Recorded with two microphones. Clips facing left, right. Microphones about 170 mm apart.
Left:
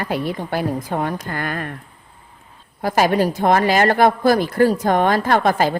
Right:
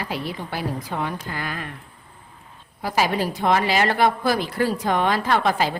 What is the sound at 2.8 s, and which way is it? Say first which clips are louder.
A woman's voice: left 6 dB; 50° left (ahead or behind).